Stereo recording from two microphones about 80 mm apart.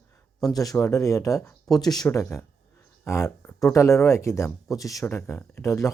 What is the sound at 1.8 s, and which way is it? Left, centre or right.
Speech, left.